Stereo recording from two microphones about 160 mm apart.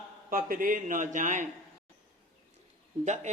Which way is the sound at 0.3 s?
60° right (ahead or behind).